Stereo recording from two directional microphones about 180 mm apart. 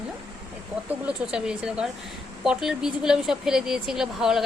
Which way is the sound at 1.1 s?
5° right (ahead or behind).